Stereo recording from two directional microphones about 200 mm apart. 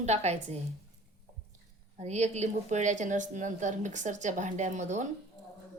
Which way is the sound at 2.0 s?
35° right (ahead or behind).